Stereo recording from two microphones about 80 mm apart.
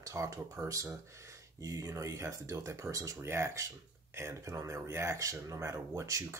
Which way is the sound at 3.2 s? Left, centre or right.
Right.